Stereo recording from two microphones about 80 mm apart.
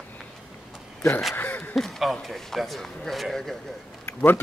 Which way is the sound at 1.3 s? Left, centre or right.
Left.